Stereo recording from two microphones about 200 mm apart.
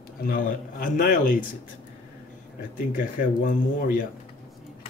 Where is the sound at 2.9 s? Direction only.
45° left (ahead or behind).